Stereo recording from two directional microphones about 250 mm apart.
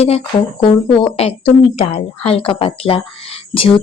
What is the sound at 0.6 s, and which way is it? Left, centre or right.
Speech, left.